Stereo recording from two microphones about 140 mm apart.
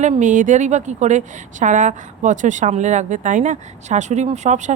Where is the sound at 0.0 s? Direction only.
60° right (ahead or behind).